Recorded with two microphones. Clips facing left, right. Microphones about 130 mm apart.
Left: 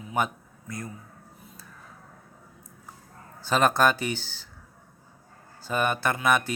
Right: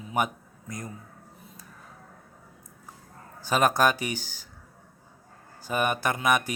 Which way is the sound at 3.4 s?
10° right (ahead or behind).